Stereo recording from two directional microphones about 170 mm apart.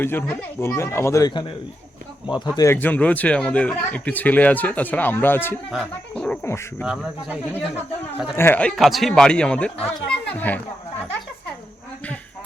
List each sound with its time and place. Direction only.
0.0 s a man's voice: 10° left (ahead or behind)
2.6 s a man's voice: 15° left (ahead or behind)
6.8 s speech: 5° right (ahead or behind)
8.4 s a man's voice: 10° left (ahead or behind)